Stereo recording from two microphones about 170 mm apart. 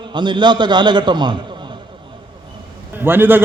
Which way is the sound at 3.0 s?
10° right (ahead or behind).